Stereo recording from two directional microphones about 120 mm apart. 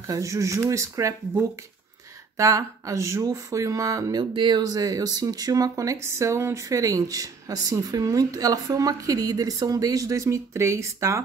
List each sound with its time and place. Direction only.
0.0 s speech: 25° right (ahead or behind)
4.2 s speech: 40° right (ahead or behind); by 11.2 s 25° right (ahead or behind)